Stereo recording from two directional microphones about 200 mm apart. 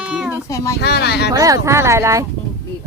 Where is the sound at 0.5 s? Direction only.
15° left (ahead or behind).